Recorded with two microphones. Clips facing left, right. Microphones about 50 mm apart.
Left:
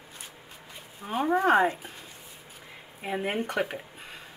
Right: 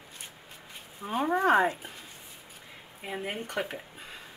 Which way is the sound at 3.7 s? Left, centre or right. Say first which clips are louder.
Left 2 dB; centre.